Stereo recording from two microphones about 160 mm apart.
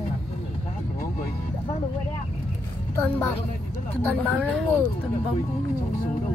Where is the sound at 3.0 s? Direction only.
15° left (ahead or behind).